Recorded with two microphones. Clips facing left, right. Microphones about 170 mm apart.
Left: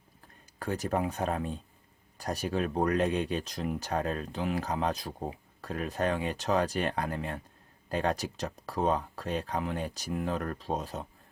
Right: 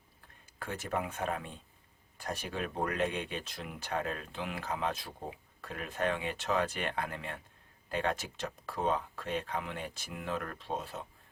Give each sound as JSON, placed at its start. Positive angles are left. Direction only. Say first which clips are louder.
{"t": 0.6, "sound": "speech", "louder": "left 6 dB", "side_deg": 40}